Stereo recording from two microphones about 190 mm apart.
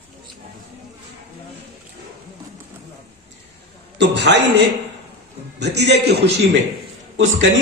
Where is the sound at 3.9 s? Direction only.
65° right (ahead or behind).